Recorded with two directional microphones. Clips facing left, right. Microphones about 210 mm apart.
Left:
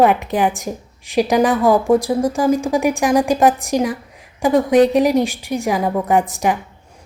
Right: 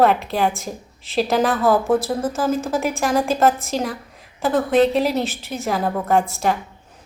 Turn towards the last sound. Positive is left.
turn(degrees=15)  # may be behind; listen again after turning